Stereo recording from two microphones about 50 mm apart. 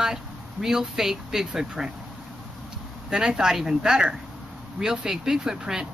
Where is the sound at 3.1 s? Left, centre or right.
Centre.